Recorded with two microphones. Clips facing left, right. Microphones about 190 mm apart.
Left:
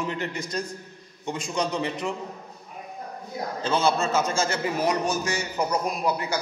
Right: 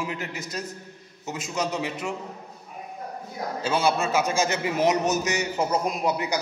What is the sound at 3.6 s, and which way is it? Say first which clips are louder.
A man's voice: even; 10° right (ahead or behind).